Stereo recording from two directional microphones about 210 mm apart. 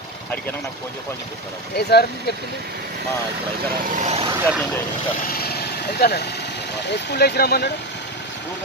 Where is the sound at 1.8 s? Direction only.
50° left (ahead or behind).